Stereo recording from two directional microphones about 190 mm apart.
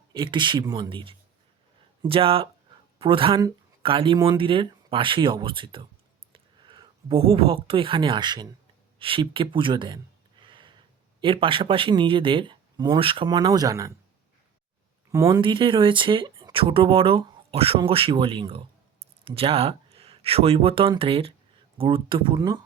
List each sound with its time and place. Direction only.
0.1 s speech: 25° right (ahead or behind)
10.4 s a sound: 25° right (ahead or behind)
11.2 s speech: 25° right (ahead or behind)
15.1 s speech: 20° right (ahead or behind)